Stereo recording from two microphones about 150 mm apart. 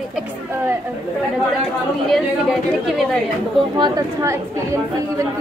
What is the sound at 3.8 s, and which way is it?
A woman's voice, 20° right (ahead or behind).